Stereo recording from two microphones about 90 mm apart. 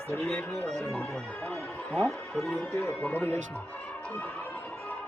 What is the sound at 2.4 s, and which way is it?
Speech, 15° left (ahead or behind).